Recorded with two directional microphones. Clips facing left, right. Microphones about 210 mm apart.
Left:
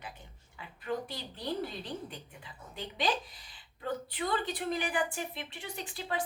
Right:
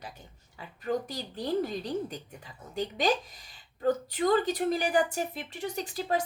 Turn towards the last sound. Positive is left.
turn(degrees=-40)  # may be behind; listen again after turning